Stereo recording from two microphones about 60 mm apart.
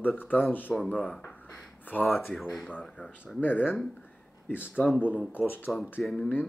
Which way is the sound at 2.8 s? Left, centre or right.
Centre.